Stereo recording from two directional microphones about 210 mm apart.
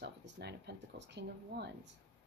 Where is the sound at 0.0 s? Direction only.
55° right (ahead or behind).